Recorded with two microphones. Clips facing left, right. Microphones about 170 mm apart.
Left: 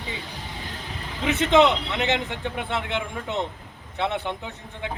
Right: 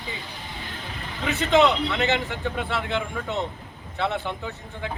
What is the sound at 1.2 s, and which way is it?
A man's voice, 20° left (ahead or behind).